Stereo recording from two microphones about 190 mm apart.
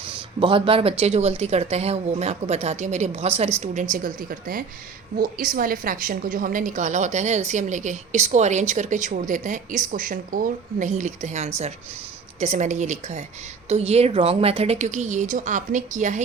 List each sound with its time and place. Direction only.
0.1 s a woman's voice: 25° right (ahead or behind)